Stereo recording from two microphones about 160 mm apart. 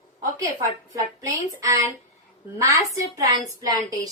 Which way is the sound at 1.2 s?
20° right (ahead or behind).